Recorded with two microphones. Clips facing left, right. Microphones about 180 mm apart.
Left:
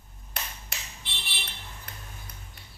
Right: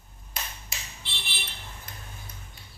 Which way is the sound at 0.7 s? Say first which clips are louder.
Even; 65° left (ahead or behind).